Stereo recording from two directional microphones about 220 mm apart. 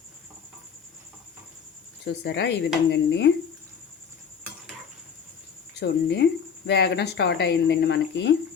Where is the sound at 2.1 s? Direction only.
50° left (ahead or behind).